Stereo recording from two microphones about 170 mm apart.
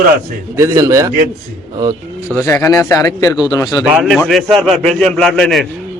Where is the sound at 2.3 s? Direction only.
15° left (ahead or behind).